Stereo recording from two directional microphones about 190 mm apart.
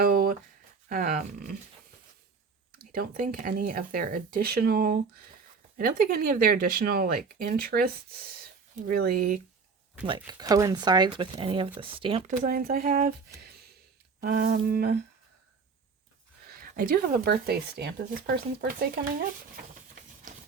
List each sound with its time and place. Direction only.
0.0 s a sound: 50° right (ahead or behind)
0.9 s dog: 50° right (ahead or behind)
2.9 s speech: 50° right (ahead or behind)
10.1 s speech: 20° right (ahead or behind)
12.5 s speech: 50° right (ahead or behind)
14.2 s speech: 45° right (ahead or behind)
16.6 s speech: 50° right (ahead or behind)